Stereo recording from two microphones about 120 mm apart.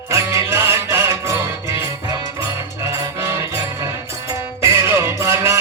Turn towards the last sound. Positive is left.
turn(degrees=-25)  # may be behind; listen again after turning